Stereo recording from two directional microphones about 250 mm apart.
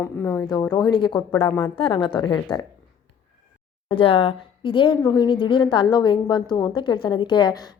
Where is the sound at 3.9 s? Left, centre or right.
Left.